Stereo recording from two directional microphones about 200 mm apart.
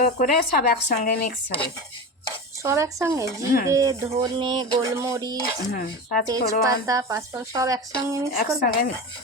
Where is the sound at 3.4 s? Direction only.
50° left (ahead or behind).